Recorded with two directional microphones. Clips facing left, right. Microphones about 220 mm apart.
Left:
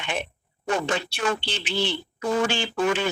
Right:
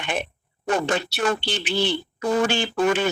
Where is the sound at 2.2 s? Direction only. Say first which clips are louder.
Right 2 dB; 40° right (ahead or behind).